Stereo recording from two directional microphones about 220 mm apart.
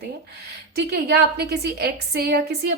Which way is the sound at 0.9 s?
50° right (ahead or behind).